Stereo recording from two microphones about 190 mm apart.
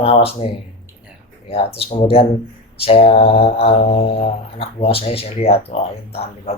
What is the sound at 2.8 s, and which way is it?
Mantra, 30° left (ahead or behind).